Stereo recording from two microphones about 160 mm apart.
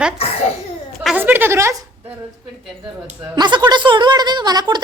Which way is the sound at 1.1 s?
10° right (ahead or behind).